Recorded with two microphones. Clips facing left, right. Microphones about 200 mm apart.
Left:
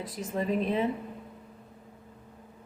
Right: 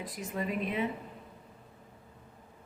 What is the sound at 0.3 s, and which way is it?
Speech, 35° left (ahead or behind).